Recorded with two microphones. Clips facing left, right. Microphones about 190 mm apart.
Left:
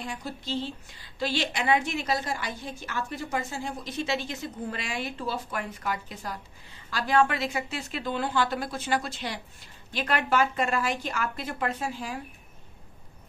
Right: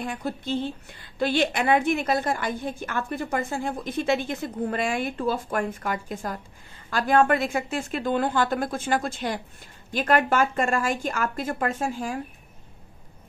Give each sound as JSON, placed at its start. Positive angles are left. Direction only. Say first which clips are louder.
{"t": 0.0, "sound": "a woman's voice", "louder": "right 6 dB", "side_deg": -55}